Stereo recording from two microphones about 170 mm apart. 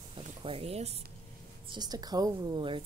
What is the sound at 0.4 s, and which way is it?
Speech, 35° right (ahead or behind).